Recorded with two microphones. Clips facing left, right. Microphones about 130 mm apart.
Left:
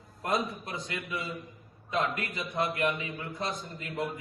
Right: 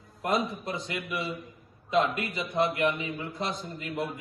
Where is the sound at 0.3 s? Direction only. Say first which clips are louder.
Right 2 dB; centre (ahead or behind).